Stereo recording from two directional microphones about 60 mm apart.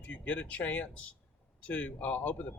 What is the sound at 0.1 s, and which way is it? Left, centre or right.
Speech, left.